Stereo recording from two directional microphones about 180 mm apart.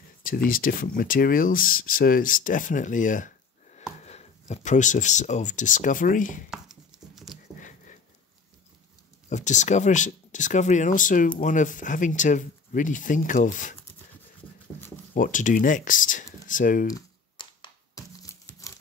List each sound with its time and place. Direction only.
0.2 s speech: 50° left (ahead or behind)
6.5 s a sound: centre (ahead or behind)
7.6 s a sound: 45° left (ahead or behind)
9.3 s speech: 40° left (ahead or behind)
15.1 s speech: 50° left (ahead or behind)
16.8 s crumpling: 25° left (ahead or behind)